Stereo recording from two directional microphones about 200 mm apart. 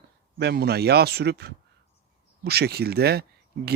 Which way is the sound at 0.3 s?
55° right (ahead or behind).